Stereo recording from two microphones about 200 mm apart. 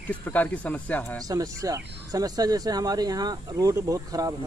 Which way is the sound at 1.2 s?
15° right (ahead or behind).